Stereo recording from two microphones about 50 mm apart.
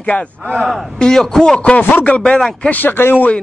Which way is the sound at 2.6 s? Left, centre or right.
Left.